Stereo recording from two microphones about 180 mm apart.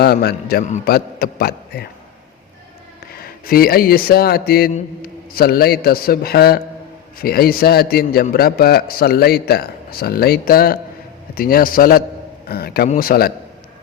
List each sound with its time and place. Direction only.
0.0 s a man's voice: 60° left (ahead or behind)
3.2 s a man's voice: 55° left (ahead or behind)